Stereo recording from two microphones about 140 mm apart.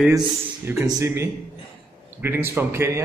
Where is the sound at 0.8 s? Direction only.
20° right (ahead or behind).